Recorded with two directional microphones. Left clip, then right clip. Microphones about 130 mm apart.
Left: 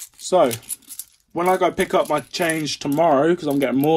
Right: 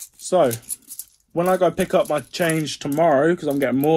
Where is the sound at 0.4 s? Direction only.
35° right (ahead or behind).